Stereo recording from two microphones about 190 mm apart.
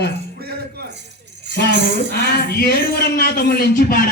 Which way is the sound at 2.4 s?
55° left (ahead or behind).